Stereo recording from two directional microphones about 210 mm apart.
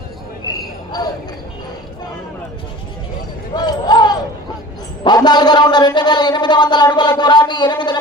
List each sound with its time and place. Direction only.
0.9 s speech: 20° left (ahead or behind)
3.5 s basketball bounce: 20° left (ahead or behind)
5.0 s a man's voice: 20° left (ahead or behind)